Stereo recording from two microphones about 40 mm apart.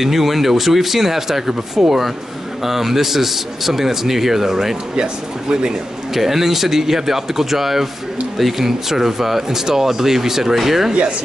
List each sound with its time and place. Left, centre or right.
0.0 s a man's voice: centre
4.9 s speech: centre
6.1 s a man's voice: centre
10.9 s speech: right